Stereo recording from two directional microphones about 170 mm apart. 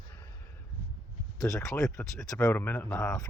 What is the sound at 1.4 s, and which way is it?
Speech, 20° left (ahead or behind).